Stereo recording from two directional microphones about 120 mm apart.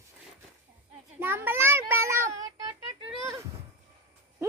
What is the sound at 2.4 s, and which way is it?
Child singing, 35° right (ahead or behind).